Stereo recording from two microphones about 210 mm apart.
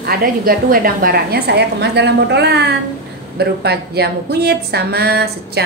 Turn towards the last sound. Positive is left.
turn(degrees=-50)  # may be behind; listen again after turning